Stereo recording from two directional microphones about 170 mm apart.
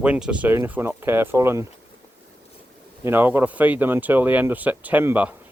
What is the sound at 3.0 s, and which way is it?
Speech, 10° right (ahead or behind).